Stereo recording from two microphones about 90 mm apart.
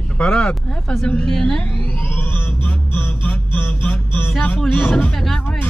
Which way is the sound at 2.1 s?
20° left (ahead or behind).